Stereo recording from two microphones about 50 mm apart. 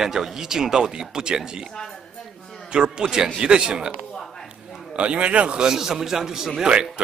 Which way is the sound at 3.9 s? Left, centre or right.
Centre.